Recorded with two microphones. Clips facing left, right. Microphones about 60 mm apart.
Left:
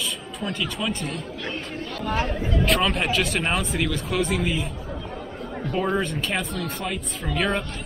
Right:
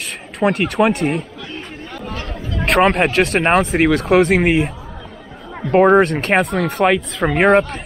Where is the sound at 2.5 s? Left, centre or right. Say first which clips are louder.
Right 9 dB; right.